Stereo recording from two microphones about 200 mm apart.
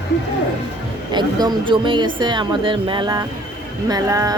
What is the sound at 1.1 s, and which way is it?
Speech, 20° right (ahead or behind).